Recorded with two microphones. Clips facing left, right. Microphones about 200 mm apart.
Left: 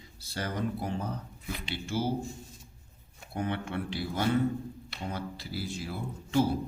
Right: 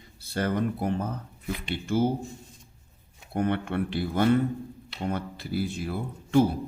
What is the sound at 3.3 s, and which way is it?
A man's voice, 55° right (ahead or behind).